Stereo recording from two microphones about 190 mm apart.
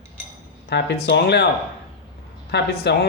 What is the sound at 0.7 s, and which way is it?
Speech, 60° left (ahead or behind).